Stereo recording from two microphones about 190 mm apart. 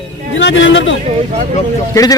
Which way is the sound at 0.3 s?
75° left (ahead or behind).